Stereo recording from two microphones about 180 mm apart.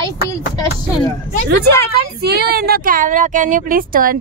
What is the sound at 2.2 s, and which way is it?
Speech, 60° right (ahead or behind).